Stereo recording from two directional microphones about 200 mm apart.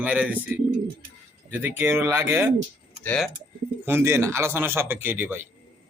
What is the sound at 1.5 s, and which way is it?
Speech, 10° right (ahead or behind).